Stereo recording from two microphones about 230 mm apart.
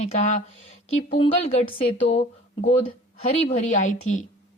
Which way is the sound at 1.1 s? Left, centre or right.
Left.